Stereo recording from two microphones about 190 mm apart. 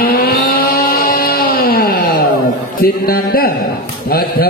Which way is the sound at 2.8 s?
50° left (ahead or behind).